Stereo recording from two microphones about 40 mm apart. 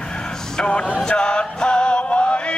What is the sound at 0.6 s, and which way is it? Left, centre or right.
Speech, left.